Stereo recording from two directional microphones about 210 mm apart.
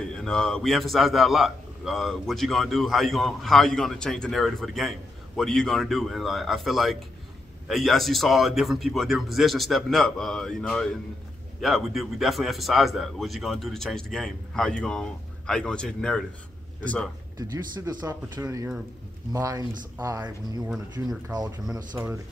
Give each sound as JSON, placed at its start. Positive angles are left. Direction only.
{"t": 0.1, "sound": "a man's voice", "side_deg": 0}
{"t": 17.4, "sound": "speech", "side_deg": -20}